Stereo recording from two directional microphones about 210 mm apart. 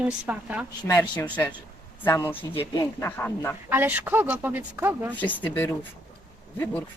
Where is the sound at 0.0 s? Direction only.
5° right (ahead or behind).